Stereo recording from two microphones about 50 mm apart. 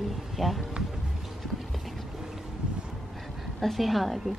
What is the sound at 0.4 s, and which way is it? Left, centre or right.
Speech, centre.